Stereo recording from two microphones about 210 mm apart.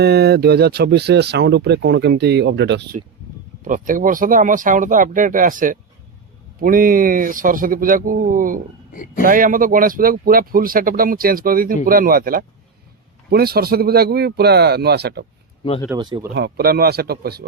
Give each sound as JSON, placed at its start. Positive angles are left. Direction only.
{"t": 0.0, "sound": "speech", "side_deg": -50}
{"t": 3.6, "sound": "speech", "side_deg": -40}
{"t": 8.9, "sound": "a man's voice", "side_deg": 40}
{"t": 9.2, "sound": "speech", "side_deg": -40}
{"t": 16.0, "sound": "speech", "side_deg": -20}
{"t": 16.3, "sound": "speech", "side_deg": -50}